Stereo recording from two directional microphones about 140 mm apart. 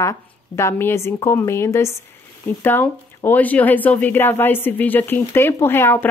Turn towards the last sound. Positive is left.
turn(degrees=15)  # may be behind; listen again after turning